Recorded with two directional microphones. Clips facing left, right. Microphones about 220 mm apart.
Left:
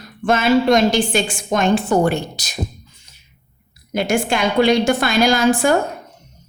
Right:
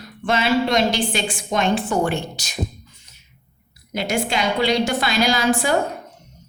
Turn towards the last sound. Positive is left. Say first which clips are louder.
# left 4 dB
turn(degrees=50)  # may be behind; listen again after turning